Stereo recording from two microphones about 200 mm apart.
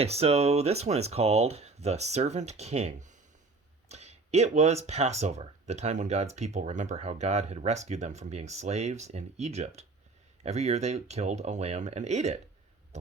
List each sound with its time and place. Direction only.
0.0 s speech: 30° right (ahead or behind)